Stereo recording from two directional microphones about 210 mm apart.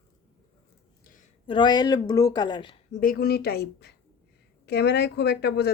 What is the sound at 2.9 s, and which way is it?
Speech, 40° left (ahead or behind).